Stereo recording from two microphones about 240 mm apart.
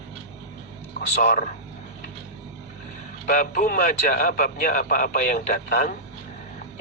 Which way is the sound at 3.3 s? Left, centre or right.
Left.